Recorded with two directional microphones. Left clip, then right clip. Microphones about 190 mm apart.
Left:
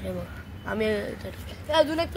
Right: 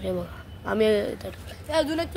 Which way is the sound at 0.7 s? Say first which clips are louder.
Right 5 dB; 45° right (ahead or behind).